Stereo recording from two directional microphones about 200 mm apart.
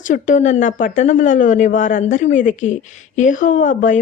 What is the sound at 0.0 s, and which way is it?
Speech, 40° left (ahead or behind).